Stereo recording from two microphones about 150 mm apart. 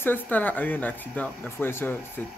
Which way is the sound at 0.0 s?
10° left (ahead or behind).